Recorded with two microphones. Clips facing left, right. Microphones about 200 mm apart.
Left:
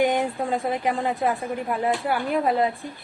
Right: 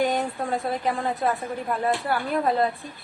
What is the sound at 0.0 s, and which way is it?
A woman's voice, 15° left (ahead or behind).